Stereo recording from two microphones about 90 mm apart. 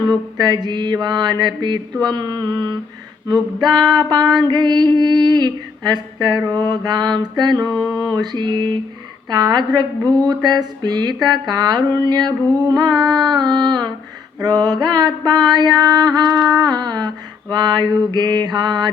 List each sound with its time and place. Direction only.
0.0 s speech: 50° right (ahead or behind)
16.2 s a sound: 5° left (ahead or behind)
16.6 s speech: 50° right (ahead or behind)